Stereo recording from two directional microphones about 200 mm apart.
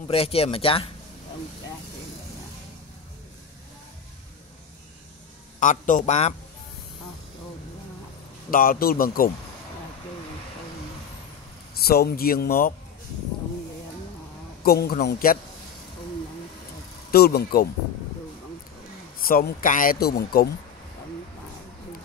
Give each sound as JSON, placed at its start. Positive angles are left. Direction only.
{"t": 0.1, "sound": "speech", "side_deg": 30}
{"t": 5.6, "sound": "a man's voice", "side_deg": 40}
{"t": 8.5, "sound": "speech", "side_deg": 45}
{"t": 11.8, "sound": "speech", "side_deg": 50}
{"t": 14.6, "sound": "speech", "side_deg": 50}
{"t": 17.1, "sound": "speech", "side_deg": 50}
{"t": 19.1, "sound": "speech", "side_deg": 45}